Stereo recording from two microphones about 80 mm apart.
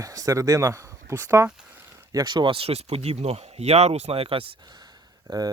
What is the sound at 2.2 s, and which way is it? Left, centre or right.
Speech, right.